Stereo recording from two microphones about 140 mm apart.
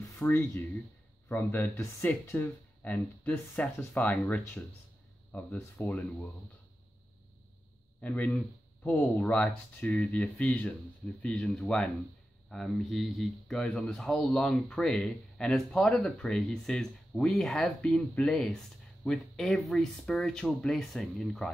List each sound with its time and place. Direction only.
0.2 s speech: 15° left (ahead or behind)
8.0 s speech: 10° left (ahead or behind)
9.1 s speech: 5° left (ahead or behind)